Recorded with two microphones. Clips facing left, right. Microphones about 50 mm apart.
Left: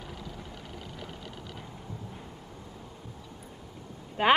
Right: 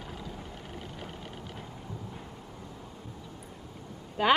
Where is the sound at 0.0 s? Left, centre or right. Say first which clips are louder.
Right 1 dB; right.